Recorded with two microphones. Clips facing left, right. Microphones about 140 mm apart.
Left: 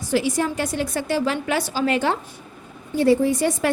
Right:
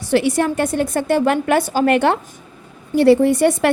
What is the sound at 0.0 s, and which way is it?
A woman's voice, 65° right (ahead or behind).